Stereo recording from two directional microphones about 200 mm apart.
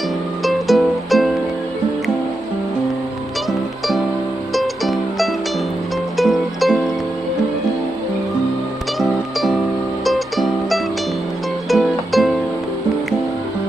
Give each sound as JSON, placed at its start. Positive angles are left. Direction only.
{"t": 0.4, "sound": "music", "side_deg": 0}
{"t": 4.5, "sound": "music", "side_deg": 0}
{"t": 9.0, "sound": "music", "side_deg": 0}